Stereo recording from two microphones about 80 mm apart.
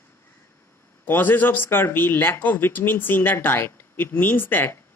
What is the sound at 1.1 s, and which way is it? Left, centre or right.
A woman's voice, left.